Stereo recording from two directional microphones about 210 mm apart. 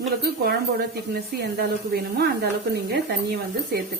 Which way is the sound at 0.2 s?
50° right (ahead or behind).